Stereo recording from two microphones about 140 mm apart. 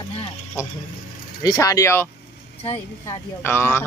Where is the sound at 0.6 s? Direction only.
20° left (ahead or behind).